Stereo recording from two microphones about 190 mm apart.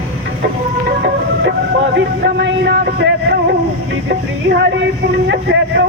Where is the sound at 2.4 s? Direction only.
65° right (ahead or behind).